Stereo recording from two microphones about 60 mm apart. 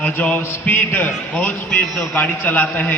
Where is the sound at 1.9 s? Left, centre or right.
Centre.